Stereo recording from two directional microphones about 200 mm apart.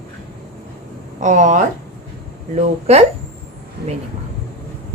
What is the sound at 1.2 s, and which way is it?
A woman's voice, 40° right (ahead or behind).